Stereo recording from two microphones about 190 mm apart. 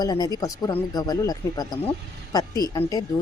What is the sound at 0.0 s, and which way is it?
A woman's voice, 20° left (ahead or behind).